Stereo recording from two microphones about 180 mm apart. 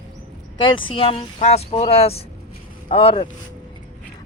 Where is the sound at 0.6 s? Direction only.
25° left (ahead or behind).